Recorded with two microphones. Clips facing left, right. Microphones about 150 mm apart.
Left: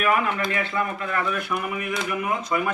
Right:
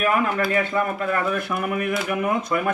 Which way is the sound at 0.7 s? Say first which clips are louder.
Right 4 dB; 45° right (ahead or behind).